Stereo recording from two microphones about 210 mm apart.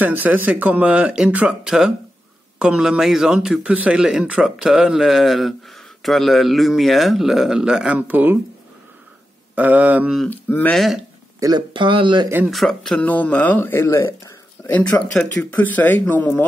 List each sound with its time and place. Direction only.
0.0 s a man's voice: 10° right (ahead or behind)
9.6 s a man's voice: 5° right (ahead or behind)
11.3 s speech: 20° right (ahead or behind)
12.4 s speech: centre (ahead or behind)